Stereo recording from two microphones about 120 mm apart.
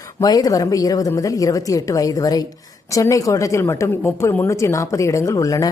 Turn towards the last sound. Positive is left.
turn(degrees=30)  # may be behind; listen again after turning